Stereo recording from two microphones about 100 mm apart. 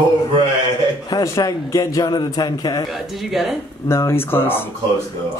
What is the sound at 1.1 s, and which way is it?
A man's voice, 35° left (ahead or behind).